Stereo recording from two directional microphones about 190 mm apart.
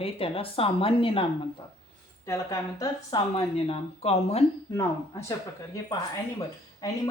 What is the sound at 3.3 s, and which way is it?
Speech, 30° left (ahead or behind).